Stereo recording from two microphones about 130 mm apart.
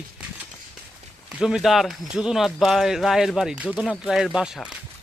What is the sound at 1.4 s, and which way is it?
Speech, 5° right (ahead or behind).